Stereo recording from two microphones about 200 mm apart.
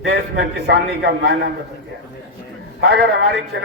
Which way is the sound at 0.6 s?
55° right (ahead or behind).